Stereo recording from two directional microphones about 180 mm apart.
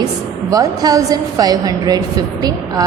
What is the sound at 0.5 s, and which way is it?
A woman's voice, 20° right (ahead or behind).